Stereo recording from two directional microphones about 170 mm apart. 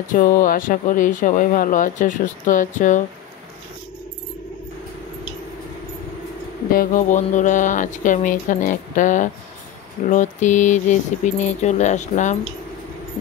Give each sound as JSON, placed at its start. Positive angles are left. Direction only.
{"t": 0.1, "sound": "speech", "side_deg": 50}
{"t": 6.7, "sound": "speech", "side_deg": 55}